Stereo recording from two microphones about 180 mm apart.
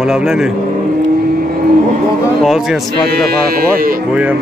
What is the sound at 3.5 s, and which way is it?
Speech, 55° right (ahead or behind).